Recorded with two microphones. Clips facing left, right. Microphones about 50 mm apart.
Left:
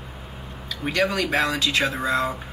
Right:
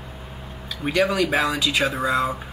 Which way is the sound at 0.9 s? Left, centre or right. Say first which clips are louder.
Right 2 dB; centre.